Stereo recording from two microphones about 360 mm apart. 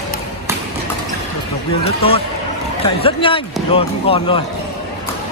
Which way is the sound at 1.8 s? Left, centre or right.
Centre.